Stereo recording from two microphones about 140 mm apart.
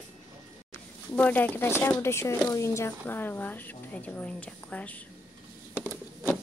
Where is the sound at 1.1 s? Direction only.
10° left (ahead or behind).